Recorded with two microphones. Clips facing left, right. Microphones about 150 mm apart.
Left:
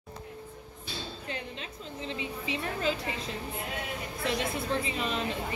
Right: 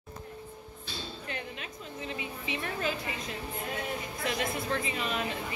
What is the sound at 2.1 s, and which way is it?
Speech, 25° left (ahead or behind).